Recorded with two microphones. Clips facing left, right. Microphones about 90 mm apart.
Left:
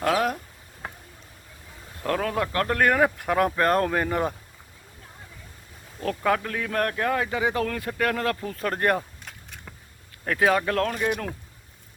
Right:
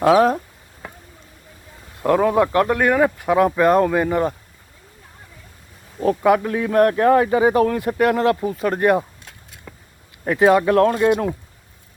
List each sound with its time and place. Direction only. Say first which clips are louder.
2.0 s speech: right 10 dB; 15° right (ahead or behind)
2.6 s speech: right 4 dB; 5° right (ahead or behind)
6.0 s speech: right 8 dB; 15° right (ahead or behind)
8.5 s speech: right 7 dB; 5° right (ahead or behind)
10.2 s speech: right 7 dB; 15° right (ahead or behind)